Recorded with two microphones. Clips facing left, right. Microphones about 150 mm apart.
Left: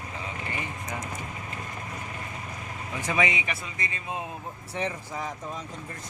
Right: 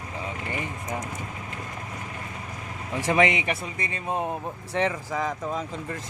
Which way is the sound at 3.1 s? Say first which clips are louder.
Right 5 dB; 60° right (ahead or behind).